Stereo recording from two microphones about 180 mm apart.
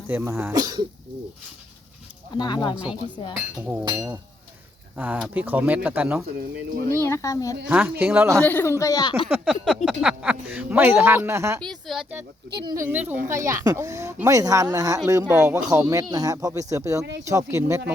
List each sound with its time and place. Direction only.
0.1 s speech: 10° right (ahead or behind)
2.3 s speech: 25° left (ahead or behind)
3.7 s speech: 15° right (ahead or behind)
7.0 s speech: 15° left (ahead or behind)
7.7 s speech: 10° right (ahead or behind)
8.4 s speech: 10° left (ahead or behind); by 9.3 s 25° left (ahead or behind)
9.3 s speech: 5° right (ahead or behind)
11.6 s speech: centre (ahead or behind)
12.6 s speech: 15° right (ahead or behind)
15.3 s speech: 5° right (ahead or behind)
15.7 s speech: 20° right (ahead or behind)